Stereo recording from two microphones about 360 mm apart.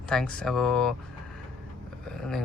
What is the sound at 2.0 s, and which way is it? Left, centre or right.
Speech, centre.